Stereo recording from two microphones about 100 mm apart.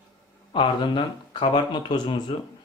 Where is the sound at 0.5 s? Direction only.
55° left (ahead or behind).